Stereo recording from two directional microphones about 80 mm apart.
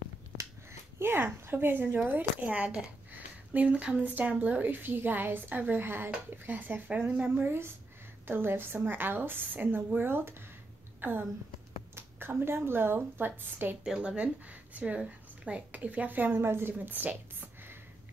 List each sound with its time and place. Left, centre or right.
0.4 s finger snapping: right
2.0 s speech: centre
11.0 s a sound: right
11.9 s a woman's voice: right
13.8 s speech: centre